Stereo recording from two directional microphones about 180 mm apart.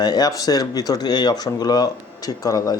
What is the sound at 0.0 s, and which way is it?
Speech, 20° left (ahead or behind).